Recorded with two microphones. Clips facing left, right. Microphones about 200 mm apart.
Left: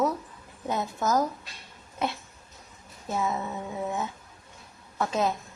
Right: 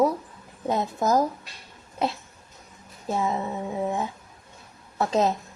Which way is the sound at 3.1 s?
30° right (ahead or behind).